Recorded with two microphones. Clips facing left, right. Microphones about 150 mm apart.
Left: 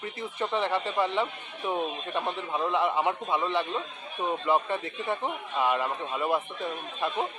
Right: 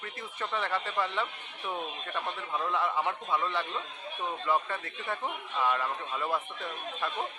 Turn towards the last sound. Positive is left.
turn(degrees=20)  # may be behind; listen again after turning